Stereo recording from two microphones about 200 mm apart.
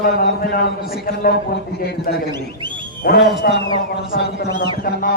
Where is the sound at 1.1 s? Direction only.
50° left (ahead or behind).